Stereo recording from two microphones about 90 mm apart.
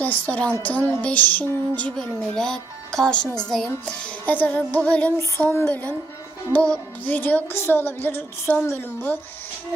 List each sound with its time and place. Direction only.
0.0 s a woman's voice: 20° left (ahead or behind)
0.6 s music: 15° left (ahead or behind)
5.4 s speech: 20° left (ahead or behind)